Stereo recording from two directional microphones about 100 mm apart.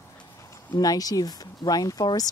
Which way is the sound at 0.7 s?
40° left (ahead or behind).